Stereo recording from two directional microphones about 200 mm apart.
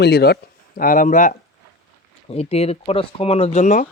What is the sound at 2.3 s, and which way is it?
Speech, 30° left (ahead or behind).